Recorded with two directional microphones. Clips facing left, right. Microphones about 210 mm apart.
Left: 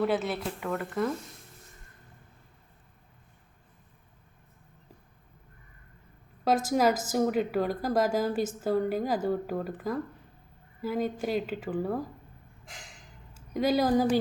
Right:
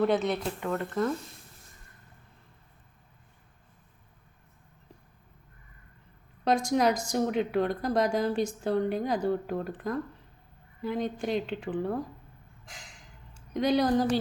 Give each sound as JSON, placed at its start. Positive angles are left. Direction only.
{"t": 0.0, "sound": "speech", "side_deg": 5}
{"t": 6.4, "sound": "speech", "side_deg": 5}
{"t": 13.3, "sound": "speech", "side_deg": 5}